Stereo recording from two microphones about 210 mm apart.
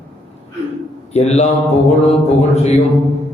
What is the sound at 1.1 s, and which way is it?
Mantra, 30° left (ahead or behind).